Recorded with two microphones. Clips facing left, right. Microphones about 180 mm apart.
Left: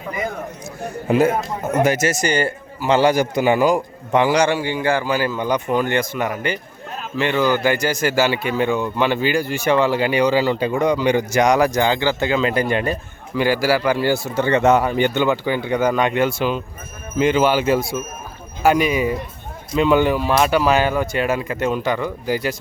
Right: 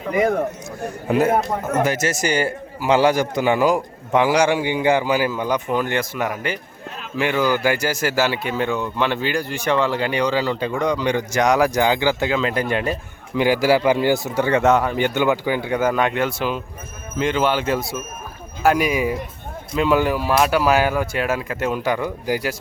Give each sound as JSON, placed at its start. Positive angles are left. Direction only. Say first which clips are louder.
{"t": 1.0, "sound": "a man's voice", "louder": "left 1 dB", "side_deg": 0}
{"t": 2.1, "sound": "a man's voice", "louder": "left 1 dB", "side_deg": -5}
{"t": 12.3, "sound": "a man's voice", "louder": "left 2 dB", "side_deg": 0}
{"t": 13.3, "sound": "speech", "louder": "right 1 dB", "side_deg": -15}
{"t": 14.7, "sound": "a man's voice", "louder": "left 2 dB", "side_deg": 0}